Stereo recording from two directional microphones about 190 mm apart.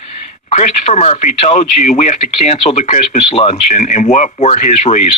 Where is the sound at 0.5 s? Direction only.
35° left (ahead or behind).